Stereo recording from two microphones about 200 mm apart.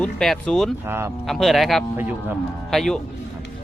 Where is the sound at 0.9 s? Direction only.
10° right (ahead or behind).